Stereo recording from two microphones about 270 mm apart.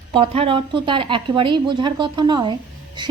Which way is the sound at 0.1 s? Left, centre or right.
Centre.